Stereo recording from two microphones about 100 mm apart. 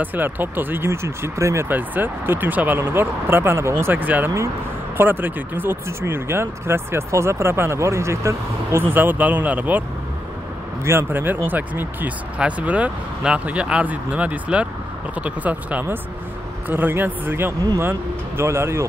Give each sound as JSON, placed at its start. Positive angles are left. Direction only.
{"t": 0.0, "sound": "speech", "side_deg": -20}
{"t": 1.7, "sound": "speech", "side_deg": -20}
{"t": 8.9, "sound": "speech", "side_deg": -20}